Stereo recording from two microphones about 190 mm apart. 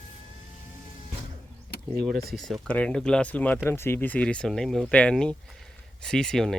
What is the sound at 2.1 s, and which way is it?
Speech, 55° right (ahead or behind).